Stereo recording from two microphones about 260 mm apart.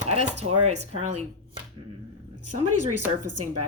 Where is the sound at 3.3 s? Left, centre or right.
Right.